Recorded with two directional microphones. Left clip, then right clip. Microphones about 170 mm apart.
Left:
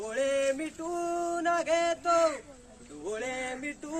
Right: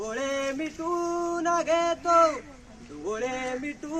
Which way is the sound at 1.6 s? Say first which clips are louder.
Right 3 dB; 15° left (ahead or behind).